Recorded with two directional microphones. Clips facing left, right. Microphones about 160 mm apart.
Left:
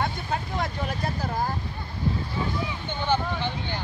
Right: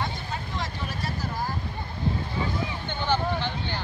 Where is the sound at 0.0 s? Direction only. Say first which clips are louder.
Left 4 dB; 55° left (ahead or behind).